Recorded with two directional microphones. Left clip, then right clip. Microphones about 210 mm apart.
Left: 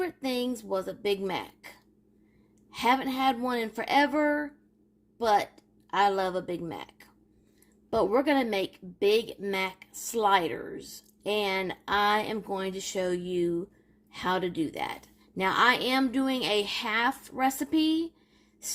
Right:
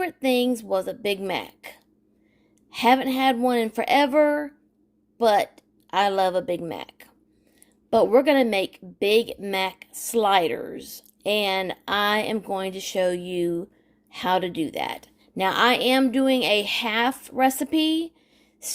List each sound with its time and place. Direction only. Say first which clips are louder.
0.0 s a woman's voice: right 8 dB; 40° right (ahead or behind)